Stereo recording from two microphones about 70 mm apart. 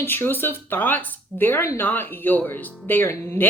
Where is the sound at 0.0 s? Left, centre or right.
Left.